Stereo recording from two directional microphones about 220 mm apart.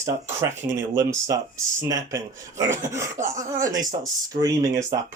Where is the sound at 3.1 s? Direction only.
35° right (ahead or behind).